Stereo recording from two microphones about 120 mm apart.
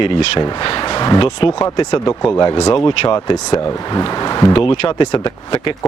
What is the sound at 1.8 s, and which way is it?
Speech, 30° left (ahead or behind).